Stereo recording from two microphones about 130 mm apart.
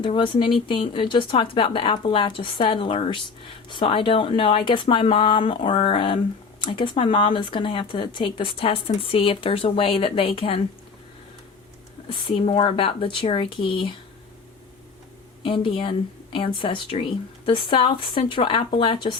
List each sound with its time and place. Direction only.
0.0 s speech: 40° left (ahead or behind)
12.0 s speech: 40° left (ahead or behind)
15.4 s speech: 40° left (ahead or behind)